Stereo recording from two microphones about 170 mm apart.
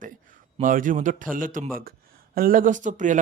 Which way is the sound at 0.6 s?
50° right (ahead or behind).